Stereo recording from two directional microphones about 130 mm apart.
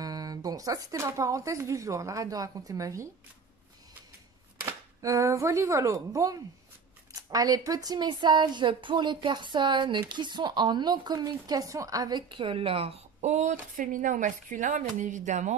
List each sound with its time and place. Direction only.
0.0 s speech: 30° right (ahead or behind)
4.6 s speech: 20° right (ahead or behind); by 15.5 s 70° right (ahead or behind)